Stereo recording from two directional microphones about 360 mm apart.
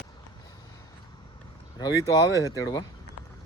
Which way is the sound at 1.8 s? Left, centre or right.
Centre.